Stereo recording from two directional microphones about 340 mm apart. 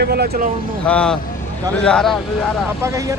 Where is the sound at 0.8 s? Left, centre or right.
Centre.